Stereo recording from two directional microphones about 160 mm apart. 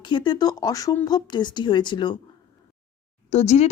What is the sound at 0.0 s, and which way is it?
Speech, 30° left (ahead or behind).